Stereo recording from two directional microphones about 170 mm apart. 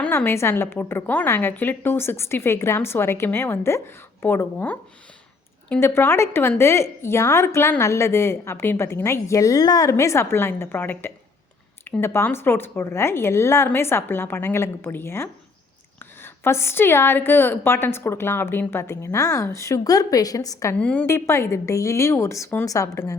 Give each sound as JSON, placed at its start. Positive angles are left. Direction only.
{"t": 0.0, "sound": "a woman's voice", "side_deg": 10}
{"t": 20.7, "sound": "a woman's voice", "side_deg": 10}